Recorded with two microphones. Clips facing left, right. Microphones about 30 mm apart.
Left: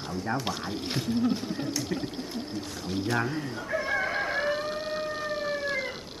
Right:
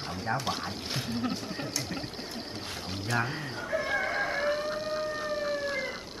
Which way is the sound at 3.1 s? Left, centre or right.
Right.